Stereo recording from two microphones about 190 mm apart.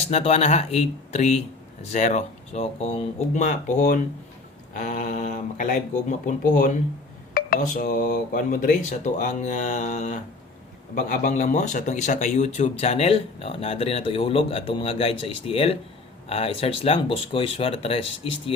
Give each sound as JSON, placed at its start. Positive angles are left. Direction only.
{"t": 0.1, "sound": "speech", "side_deg": 35}